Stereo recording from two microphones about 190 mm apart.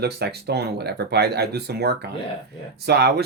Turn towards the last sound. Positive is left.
turn(degrees=-60)  # may be behind; listen again after turning